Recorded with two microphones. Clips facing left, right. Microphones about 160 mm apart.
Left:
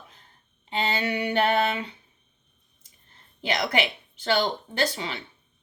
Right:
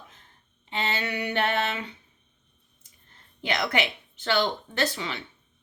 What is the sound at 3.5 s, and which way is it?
A woman's voice, 35° left (ahead or behind).